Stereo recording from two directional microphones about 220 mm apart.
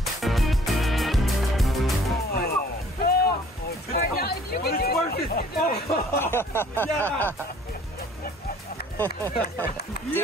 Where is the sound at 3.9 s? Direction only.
45° left (ahead or behind).